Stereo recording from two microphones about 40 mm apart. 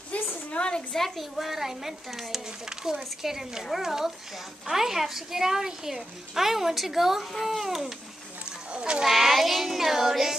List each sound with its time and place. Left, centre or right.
0.1 s a sound: left
0.5 s a sound: left
0.9 s a woman's voice: centre
2.4 s a child's voice: centre
8.5 s wild animals: right
9.0 s a child's voice: centre